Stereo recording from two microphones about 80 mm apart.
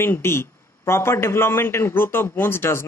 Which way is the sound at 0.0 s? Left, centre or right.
Left.